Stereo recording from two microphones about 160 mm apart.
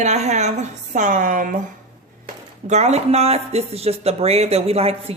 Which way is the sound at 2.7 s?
45° right (ahead or behind).